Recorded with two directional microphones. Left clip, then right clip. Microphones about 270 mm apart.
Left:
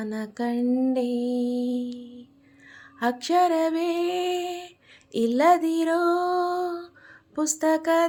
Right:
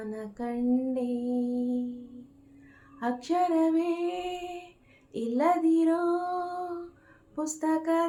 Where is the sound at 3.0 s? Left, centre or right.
Left.